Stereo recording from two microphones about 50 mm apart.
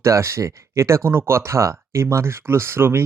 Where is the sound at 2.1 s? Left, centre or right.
Right.